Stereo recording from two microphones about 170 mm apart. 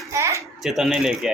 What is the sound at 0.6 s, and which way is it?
Speech, centre (ahead or behind).